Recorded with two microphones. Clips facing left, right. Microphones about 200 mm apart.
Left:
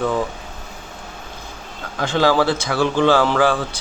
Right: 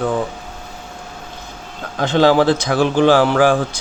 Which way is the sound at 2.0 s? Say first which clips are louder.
Right 4 dB; 20° right (ahead or behind).